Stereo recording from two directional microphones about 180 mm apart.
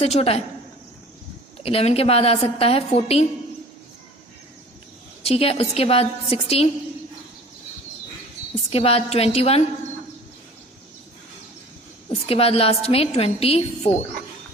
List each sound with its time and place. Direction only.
0.0 s a woman's voice: 35° left (ahead or behind)
1.6 s a woman's voice: 35° left (ahead or behind)
5.2 s a woman's voice: 35° left (ahead or behind)
8.7 s a woman's voice: 35° left (ahead or behind)
12.2 s a woman's voice: 30° left (ahead or behind)